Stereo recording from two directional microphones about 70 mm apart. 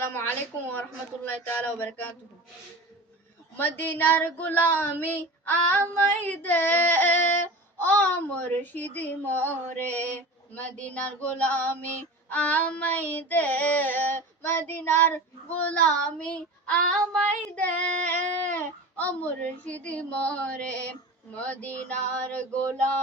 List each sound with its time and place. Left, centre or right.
0.7 s female singing: left
3.6 s female singing: left
14.7 s child singing: left
17.1 s female singing: left